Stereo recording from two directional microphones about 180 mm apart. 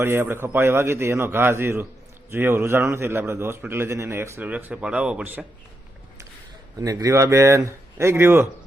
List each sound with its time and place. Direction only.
0.0 s a man's voice: 15° right (ahead or behind)
6.7 s a man's voice: 20° right (ahead or behind)